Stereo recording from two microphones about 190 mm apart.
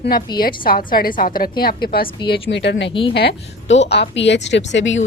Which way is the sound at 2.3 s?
65° left (ahead or behind).